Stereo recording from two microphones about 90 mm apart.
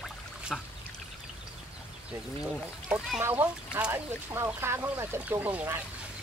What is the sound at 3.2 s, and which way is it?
Speech, 20° right (ahead or behind).